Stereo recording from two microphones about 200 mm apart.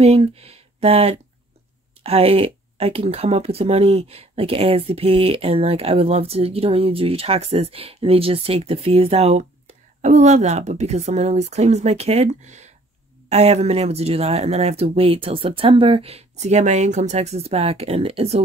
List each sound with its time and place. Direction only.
0.0 s speech: 30° right (ahead or behind)